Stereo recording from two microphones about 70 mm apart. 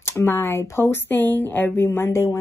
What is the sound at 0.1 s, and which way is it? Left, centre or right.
A woman's voice, left.